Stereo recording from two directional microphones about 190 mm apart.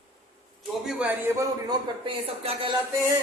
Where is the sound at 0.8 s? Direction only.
5° right (ahead or behind).